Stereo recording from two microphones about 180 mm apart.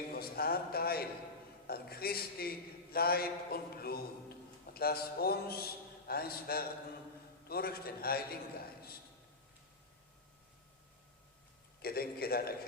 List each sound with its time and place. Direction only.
0.1 s a man's voice: 55° left (ahead or behind)
11.8 s a man's voice: 60° left (ahead or behind)